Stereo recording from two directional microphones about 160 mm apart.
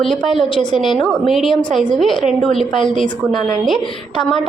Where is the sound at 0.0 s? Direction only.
Centre (ahead or behind).